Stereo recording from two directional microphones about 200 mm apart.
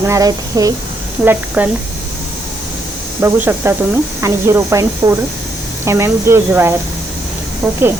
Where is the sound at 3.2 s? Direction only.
10° right (ahead or behind).